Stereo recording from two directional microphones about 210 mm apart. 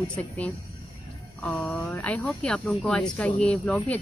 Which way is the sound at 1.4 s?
5° left (ahead or behind).